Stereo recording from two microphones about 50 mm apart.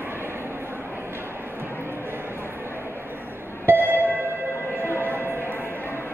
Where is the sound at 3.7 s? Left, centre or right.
Right.